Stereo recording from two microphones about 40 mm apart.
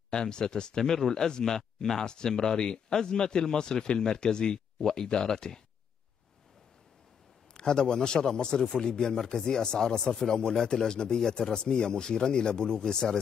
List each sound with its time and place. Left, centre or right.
0.1 s speech: centre
7.5 s speech: centre